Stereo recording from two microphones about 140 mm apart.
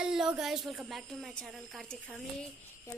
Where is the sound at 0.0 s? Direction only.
5° right (ahead or behind).